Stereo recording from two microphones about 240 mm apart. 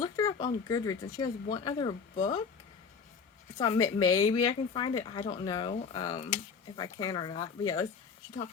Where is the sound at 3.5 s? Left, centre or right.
Centre.